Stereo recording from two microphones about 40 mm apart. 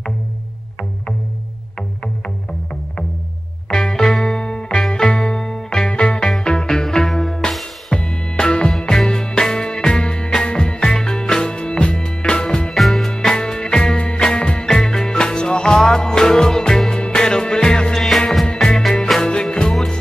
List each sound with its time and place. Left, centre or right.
2.2 s music: left
3.6 s music: centre
4.4 s music: left
5.9 s music: left
7.1 s music: centre
8.0 s music: left
8.8 s music: centre
12.7 s music: centre
13.1 s music: centre
14.7 s music: centre